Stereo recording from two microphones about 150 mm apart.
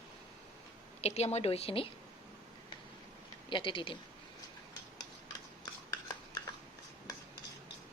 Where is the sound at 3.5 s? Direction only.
35° left (ahead or behind).